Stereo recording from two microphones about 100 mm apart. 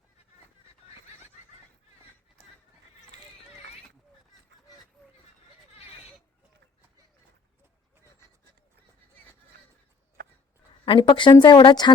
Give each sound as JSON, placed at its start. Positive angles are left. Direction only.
{"t": 10.8, "sound": "speech", "side_deg": 60}